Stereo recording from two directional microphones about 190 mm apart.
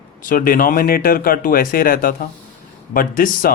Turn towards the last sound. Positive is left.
turn(degrees=50)  # may be behind; listen again after turning